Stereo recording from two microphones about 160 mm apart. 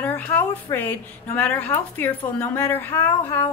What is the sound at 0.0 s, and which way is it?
Speech, 10° left (ahead or behind).